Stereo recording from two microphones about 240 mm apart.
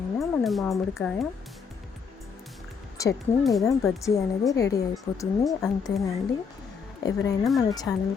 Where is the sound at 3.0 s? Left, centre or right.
Centre.